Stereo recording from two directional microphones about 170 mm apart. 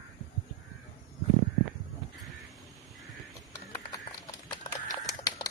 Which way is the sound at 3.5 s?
15° left (ahead or behind).